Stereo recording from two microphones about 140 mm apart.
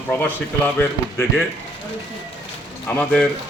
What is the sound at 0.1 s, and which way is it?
Speech, 15° left (ahead or behind).